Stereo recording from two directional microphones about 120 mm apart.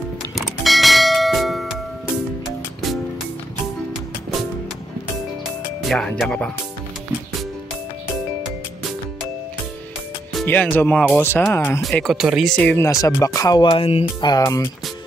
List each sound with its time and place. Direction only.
0.4 s church bell: centre (ahead or behind)
5.8 s speech: 5° left (ahead or behind)
10.4 s speech: 15° left (ahead or behind)
11.8 s speech: 5° left (ahead or behind)
12.5 s speech: 15° left (ahead or behind)
12.8 s speech: 30° left (ahead or behind)
13.7 s speech: 55° left (ahead or behind)
14.4 s speech: 25° left (ahead or behind)